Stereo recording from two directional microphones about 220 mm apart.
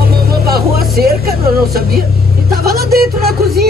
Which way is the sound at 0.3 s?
45° right (ahead or behind).